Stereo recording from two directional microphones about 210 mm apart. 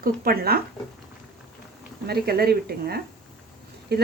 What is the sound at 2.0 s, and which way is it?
Speech, 50° right (ahead or behind).